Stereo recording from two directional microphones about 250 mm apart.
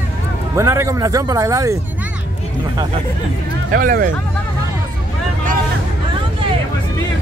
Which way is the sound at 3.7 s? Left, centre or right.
Right.